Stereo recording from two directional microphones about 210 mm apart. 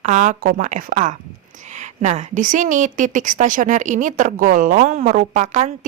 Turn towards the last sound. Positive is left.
turn(degrees=-35)  # may be behind; listen again after turning